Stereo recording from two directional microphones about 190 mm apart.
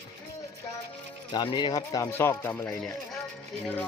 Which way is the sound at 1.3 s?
25° left (ahead or behind).